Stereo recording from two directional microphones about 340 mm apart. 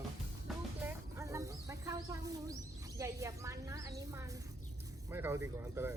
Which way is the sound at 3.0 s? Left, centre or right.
Centre.